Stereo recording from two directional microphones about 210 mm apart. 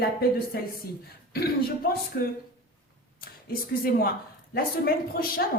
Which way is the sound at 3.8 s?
45° left (ahead or behind).